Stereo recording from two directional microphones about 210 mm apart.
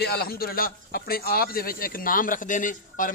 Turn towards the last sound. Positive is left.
turn(degrees=40)  # may be behind; listen again after turning